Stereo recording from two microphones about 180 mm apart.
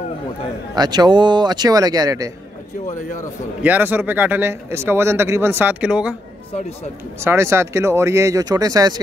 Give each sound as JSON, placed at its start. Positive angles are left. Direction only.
{"t": 0.7, "sound": "a man's voice", "side_deg": -25}
{"t": 2.9, "sound": "a man's voice", "side_deg": 45}
{"t": 3.6, "sound": "speech", "side_deg": -10}
{"t": 7.2, "sound": "speech", "side_deg": -15}